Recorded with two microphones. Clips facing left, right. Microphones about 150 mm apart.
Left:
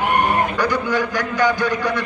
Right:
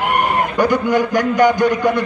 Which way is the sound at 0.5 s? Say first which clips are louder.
Right 5 dB; 20° right (ahead or behind).